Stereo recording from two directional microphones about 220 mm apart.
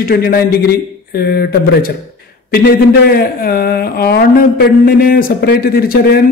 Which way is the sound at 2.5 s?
45° left (ahead or behind).